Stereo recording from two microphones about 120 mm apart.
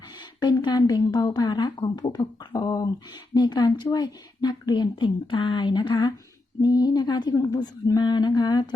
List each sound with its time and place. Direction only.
0.3 s speech: 35° left (ahead or behind)